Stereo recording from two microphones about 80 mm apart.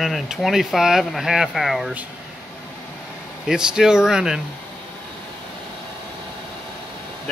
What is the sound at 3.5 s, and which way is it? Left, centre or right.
Speech, centre.